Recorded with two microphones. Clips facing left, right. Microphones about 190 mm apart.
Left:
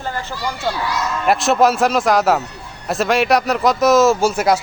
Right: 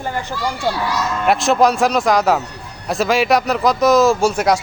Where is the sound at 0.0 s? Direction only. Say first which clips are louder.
Right 2 dB; 15° right (ahead or behind).